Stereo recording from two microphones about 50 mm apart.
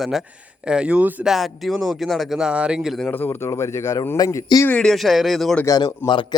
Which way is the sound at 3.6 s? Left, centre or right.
Left.